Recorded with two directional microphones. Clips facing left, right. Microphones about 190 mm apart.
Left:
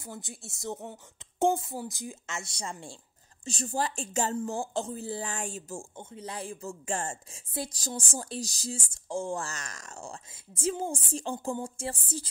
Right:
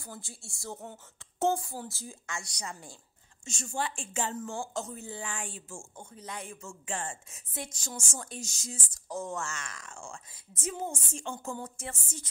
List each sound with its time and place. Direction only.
0.0 s a woman's voice: 20° left (ahead or behind); by 5.9 s 40° left (ahead or behind)
5.9 s speech: 25° left (ahead or behind); by 7.3 s 40° left (ahead or behind)
7.3 s a woman's voice: 30° left (ahead or behind)